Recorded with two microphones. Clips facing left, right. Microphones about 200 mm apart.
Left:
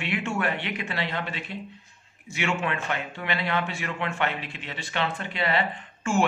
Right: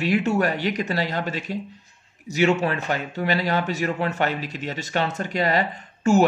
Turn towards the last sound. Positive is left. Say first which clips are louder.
# right 8 dB
turn(degrees=-40)  # may be behind; listen again after turning